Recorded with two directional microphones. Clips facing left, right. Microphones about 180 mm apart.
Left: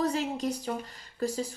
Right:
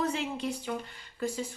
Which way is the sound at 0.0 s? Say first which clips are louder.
Left 3 dB; 40° left (ahead or behind).